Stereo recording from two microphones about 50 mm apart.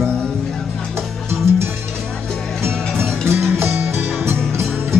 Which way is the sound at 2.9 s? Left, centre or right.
Right.